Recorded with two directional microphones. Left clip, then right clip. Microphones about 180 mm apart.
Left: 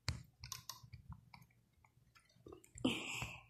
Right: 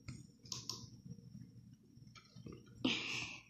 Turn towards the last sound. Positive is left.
turn(degrees=5)  # may be behind; listen again after turning